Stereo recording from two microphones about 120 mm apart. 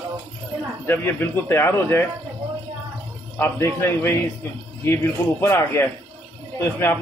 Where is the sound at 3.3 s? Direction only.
20° left (ahead or behind).